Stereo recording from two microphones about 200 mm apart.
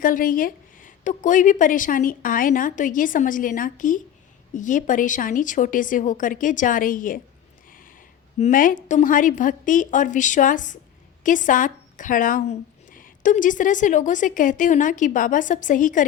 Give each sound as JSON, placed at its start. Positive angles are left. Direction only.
{"t": 0.0, "sound": "speech", "side_deg": 45}
{"t": 7.7, "sound": "a sound", "side_deg": 45}
{"t": 8.4, "sound": "speech", "side_deg": 40}